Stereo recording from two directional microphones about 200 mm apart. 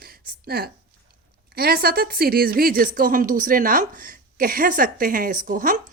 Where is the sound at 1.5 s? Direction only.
50° right (ahead or behind).